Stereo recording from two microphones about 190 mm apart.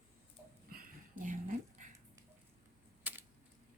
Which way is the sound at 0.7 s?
50° right (ahead or behind).